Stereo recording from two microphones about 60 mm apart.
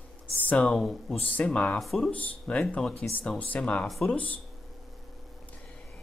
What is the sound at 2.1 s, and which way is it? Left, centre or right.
Speech, centre.